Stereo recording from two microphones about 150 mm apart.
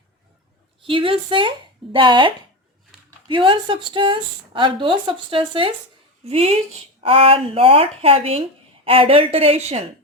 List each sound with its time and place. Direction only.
0.8 s speech: 35° right (ahead or behind)